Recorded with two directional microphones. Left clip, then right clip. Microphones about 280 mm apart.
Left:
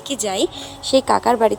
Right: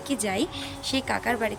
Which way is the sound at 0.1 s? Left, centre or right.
Centre.